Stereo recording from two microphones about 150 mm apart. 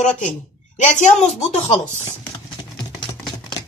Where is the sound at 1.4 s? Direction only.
50° left (ahead or behind).